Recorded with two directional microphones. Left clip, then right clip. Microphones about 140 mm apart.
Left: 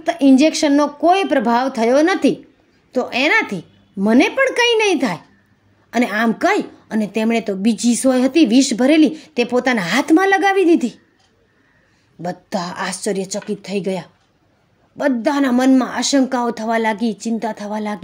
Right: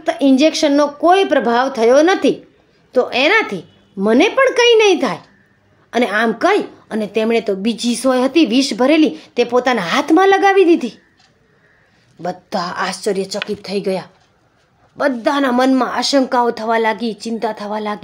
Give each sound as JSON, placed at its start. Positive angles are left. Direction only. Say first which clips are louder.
{"t": 0.0, "sound": "a woman's voice", "louder": "even", "side_deg": 50}
{"t": 12.2, "sound": "speech", "louder": "right 3 dB", "side_deg": 35}